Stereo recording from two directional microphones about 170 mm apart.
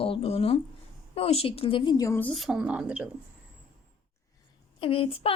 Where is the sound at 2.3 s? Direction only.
Centre (ahead or behind).